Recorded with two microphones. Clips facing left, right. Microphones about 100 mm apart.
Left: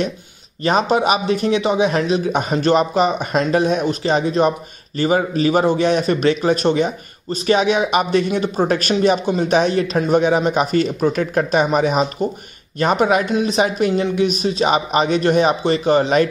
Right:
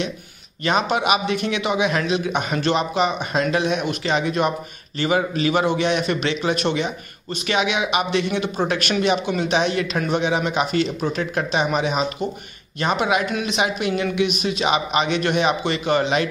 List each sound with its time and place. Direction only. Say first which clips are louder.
0.7 s a man's voice: left 4 dB; 35° left (ahead or behind)